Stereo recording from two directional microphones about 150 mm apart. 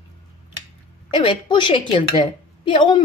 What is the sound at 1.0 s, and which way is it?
A woman's voice, 35° left (ahead or behind).